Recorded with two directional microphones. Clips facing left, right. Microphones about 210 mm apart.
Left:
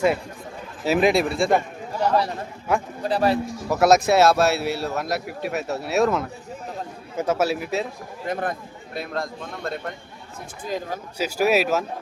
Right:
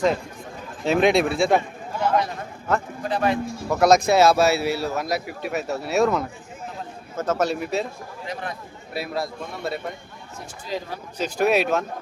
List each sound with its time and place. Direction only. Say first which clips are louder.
0.9 s speech: right 1 dB; 5° left (ahead or behind)
2.0 s a man's voice: left 1 dB; 35° left (ahead or behind)
3.7 s speech: even; 5° left (ahead or behind)
8.3 s speech: left 6 dB; 50° left (ahead or behind)
8.9 s speech: right 1 dB; 5° right (ahead or behind)
10.7 s speech: left 2 dB; 45° left (ahead or behind)
11.2 s speech: even; 5° left (ahead or behind)